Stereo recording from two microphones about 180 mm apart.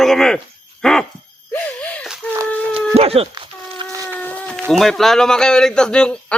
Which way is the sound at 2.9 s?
35° right (ahead or behind).